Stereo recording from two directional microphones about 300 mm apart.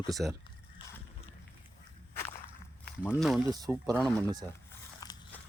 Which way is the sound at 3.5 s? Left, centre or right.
Centre.